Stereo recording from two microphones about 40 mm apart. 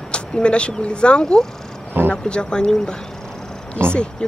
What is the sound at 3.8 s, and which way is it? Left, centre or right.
Speech, left.